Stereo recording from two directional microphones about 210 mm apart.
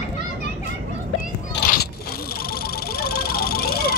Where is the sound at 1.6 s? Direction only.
45° left (ahead or behind).